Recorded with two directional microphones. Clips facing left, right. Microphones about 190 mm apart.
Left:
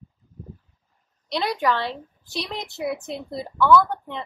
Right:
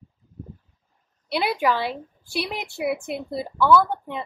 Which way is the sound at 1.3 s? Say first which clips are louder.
Right 1 dB; 10° right (ahead or behind).